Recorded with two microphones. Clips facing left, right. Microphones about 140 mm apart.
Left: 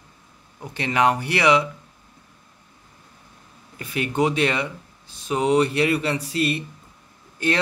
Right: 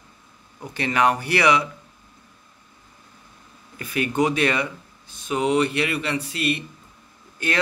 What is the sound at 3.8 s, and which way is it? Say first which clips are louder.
Speech: even; 25° left (ahead or behind).